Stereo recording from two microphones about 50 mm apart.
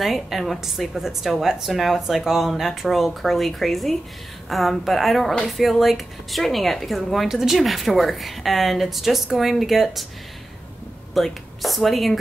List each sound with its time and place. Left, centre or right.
0.0 s speech: centre
11.1 s speech: centre